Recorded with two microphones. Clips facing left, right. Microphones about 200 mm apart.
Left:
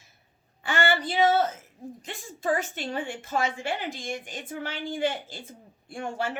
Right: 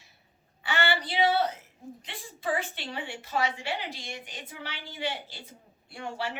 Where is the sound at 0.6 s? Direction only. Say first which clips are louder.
Left 3 dB; 45° left (ahead or behind).